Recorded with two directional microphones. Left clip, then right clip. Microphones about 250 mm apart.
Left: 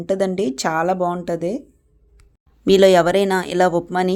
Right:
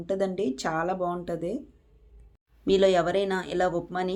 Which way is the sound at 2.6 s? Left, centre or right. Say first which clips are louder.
Left 9 dB; left.